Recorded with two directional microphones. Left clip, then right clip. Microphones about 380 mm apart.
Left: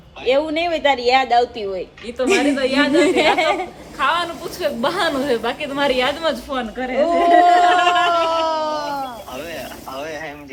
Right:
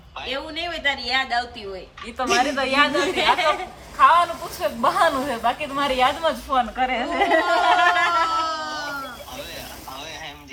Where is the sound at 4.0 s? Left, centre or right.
Centre.